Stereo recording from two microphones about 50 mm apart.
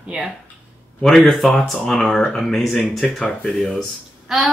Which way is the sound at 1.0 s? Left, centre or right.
Centre.